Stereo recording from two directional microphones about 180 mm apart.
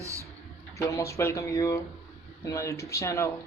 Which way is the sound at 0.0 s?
15° right (ahead or behind).